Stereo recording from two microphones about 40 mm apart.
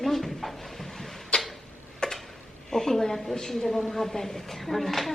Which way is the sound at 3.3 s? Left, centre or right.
Centre.